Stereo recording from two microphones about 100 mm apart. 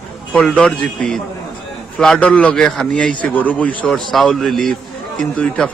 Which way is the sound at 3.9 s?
Centre (ahead or behind).